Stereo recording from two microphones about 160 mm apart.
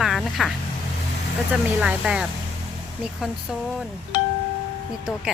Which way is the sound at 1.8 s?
5° right (ahead or behind).